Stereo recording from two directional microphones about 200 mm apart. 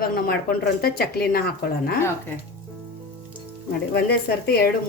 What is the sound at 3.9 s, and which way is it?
Speech, 55° left (ahead or behind).